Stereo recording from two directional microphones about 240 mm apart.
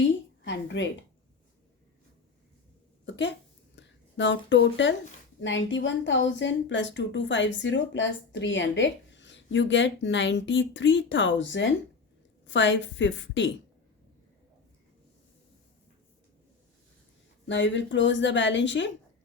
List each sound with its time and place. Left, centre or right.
0.0 s a sound: left
3.1 s speech: left
17.5 s speech: left